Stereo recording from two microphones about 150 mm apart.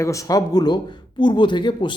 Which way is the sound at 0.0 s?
20° left (ahead or behind).